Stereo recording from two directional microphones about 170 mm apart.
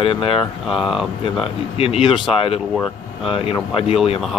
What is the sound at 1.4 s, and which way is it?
Speech, 30° left (ahead or behind).